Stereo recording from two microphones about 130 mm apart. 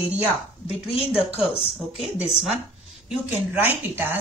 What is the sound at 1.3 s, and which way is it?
Speech, 50° left (ahead or behind).